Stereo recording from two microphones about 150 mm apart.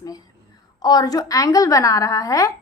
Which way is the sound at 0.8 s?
25° left (ahead or behind).